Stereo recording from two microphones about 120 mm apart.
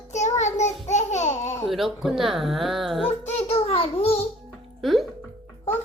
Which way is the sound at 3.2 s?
60° left (ahead or behind).